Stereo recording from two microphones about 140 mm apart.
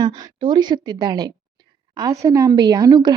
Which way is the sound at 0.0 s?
30° right (ahead or behind).